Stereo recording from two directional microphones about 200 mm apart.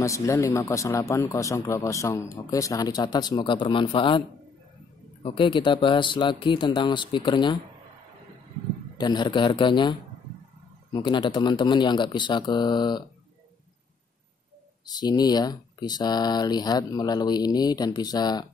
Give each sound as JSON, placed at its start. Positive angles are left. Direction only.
{"t": 0.0, "sound": "speech", "side_deg": 15}
{"t": 5.2, "sound": "speech", "side_deg": 25}
{"t": 8.9, "sound": "speech", "side_deg": 20}
{"t": 14.9, "sound": "speech", "side_deg": 20}